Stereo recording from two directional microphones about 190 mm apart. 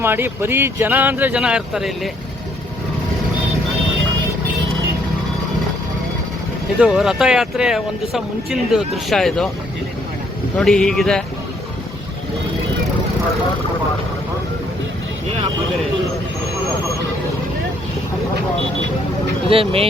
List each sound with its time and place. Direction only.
0.0 s speech: 10° right (ahead or behind)
6.7 s speech: 5° right (ahead or behind)
10.6 s speech: 5° left (ahead or behind)
19.5 s speech: 30° right (ahead or behind)